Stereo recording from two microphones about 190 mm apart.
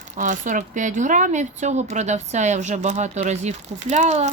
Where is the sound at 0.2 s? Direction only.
40° right (ahead or behind).